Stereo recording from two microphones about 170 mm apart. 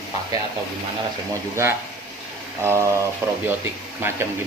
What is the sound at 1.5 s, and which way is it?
Speech, 15° right (ahead or behind).